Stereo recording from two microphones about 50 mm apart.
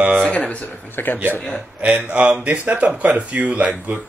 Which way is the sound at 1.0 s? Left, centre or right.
Left.